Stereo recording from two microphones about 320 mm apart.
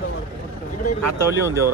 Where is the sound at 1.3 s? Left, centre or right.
Centre.